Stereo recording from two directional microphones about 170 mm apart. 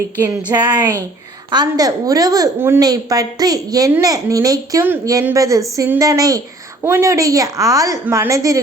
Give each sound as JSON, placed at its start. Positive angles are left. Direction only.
{"t": 0.2, "sound": "a woman's voice", "side_deg": -15}